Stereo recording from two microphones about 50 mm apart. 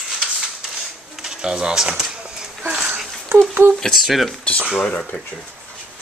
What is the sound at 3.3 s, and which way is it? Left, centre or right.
Speech, right.